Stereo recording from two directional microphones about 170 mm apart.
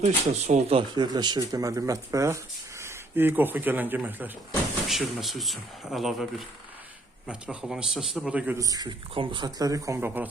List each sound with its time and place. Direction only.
0.0 s speech: 40° right (ahead or behind); by 6.2 s centre (ahead or behind)
7.3 s speech: 5° right (ahead or behind)
8.5 s speech: 20° right (ahead or behind)